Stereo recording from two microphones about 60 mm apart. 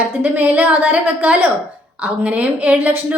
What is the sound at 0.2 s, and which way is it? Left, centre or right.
A woman's voice, right.